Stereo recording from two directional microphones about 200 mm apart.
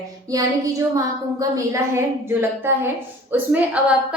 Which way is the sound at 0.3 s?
15° right (ahead or behind).